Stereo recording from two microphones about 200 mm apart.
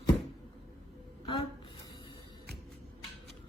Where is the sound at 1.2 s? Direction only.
25° left (ahead or behind).